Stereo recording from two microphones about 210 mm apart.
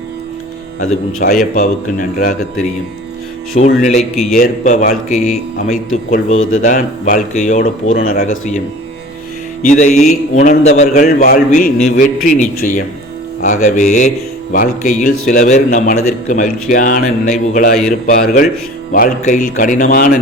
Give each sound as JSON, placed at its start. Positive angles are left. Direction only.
{"t": 1.2, "sound": "a man's voice", "side_deg": 45}
{"t": 3.5, "sound": "a man's voice", "side_deg": 40}
{"t": 6.3, "sound": "speech", "side_deg": 80}
{"t": 6.7, "sound": "a man's voice", "side_deg": 40}
{"t": 9.6, "sound": "a man's voice", "side_deg": 35}